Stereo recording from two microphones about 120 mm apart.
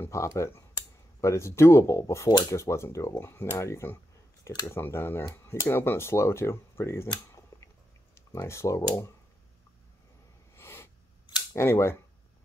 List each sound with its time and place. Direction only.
0.0 s speech: 25° left (ahead or behind)
7.2 s computer keyboard: 25° left (ahead or behind)
10.5 s a sound: 20° left (ahead or behind)
11.5 s speech: 20° left (ahead or behind)